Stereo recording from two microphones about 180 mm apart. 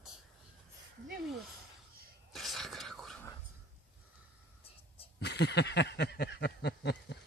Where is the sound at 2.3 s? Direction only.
Centre (ahead or behind).